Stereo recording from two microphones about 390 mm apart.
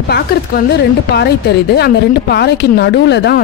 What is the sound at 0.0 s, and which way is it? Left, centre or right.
Speech, left.